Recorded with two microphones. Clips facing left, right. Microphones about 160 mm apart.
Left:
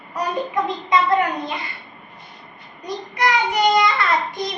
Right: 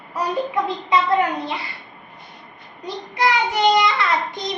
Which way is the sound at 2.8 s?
25° right (ahead or behind).